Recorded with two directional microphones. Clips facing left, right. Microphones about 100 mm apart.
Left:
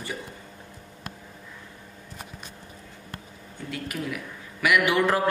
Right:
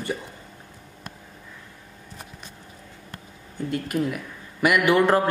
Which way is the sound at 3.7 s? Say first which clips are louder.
Right 6 dB; 45° right (ahead or behind).